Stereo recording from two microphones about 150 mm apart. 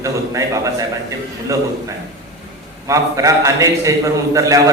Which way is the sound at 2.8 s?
20° right (ahead or behind).